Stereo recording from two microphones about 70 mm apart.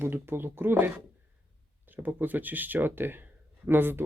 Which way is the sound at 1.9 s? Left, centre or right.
Right.